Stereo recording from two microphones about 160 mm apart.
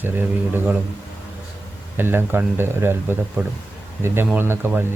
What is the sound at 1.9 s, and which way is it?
Speech, 15° right (ahead or behind).